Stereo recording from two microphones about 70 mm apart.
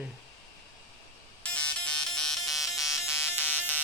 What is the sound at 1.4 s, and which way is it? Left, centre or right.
Ringtone, centre.